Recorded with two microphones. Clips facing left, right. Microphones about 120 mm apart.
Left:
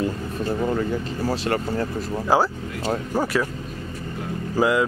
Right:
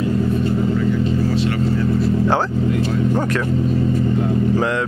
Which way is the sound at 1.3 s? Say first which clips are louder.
Right 5 dB; 40° left (ahead or behind).